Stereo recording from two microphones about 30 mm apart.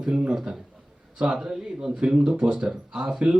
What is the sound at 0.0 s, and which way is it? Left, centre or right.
Speech, right.